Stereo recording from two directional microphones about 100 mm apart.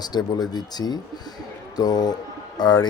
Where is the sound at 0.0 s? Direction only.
45° left (ahead or behind).